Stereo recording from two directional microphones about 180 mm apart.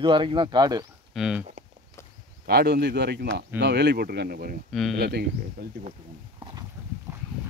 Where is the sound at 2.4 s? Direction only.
65° right (ahead or behind).